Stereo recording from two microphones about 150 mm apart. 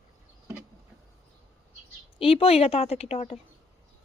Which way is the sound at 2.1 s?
40° left (ahead or behind).